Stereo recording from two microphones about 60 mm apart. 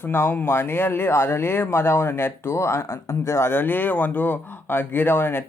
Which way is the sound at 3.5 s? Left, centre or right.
Left.